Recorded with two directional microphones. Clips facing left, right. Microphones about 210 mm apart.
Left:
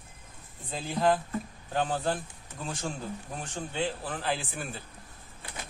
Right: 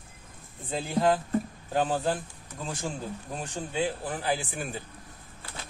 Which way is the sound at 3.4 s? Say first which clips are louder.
Right 3 dB; 10° right (ahead or behind).